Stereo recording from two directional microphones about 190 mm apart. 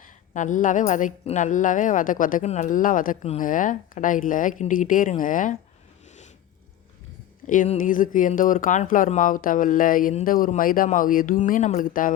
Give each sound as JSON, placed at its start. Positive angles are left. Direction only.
{"t": 0.0, "sound": "a woman's voice", "side_deg": 40}
{"t": 7.4, "sound": "a woman's voice", "side_deg": 40}